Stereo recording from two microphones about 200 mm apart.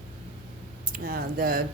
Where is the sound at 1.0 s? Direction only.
45° right (ahead or behind).